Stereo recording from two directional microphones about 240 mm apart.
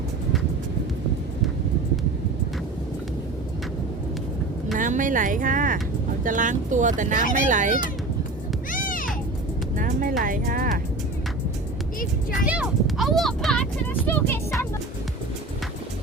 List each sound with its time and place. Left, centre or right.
4.7 s speech: right
8.7 s music: left
9.7 s music: right
12.3 s a sound: centre